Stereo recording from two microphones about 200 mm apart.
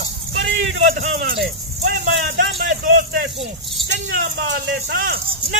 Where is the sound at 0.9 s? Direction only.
45° right (ahead or behind).